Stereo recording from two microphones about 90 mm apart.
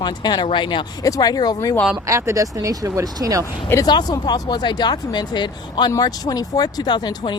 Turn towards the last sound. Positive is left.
turn(degrees=55)  # may be behind; listen again after turning